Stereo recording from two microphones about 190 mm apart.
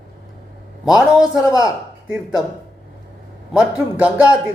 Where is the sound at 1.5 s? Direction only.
15° left (ahead or behind).